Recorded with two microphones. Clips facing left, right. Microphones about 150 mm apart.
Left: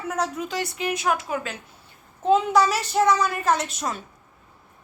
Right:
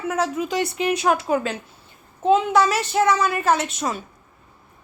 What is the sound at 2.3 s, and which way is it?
A woman's voice, centre (ahead or behind).